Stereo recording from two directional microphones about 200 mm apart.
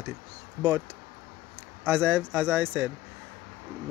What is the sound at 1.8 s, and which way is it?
Speech, 10° right (ahead or behind).